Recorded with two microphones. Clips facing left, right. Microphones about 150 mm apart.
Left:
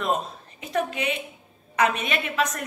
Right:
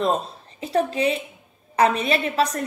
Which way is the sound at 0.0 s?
30° right (ahead or behind).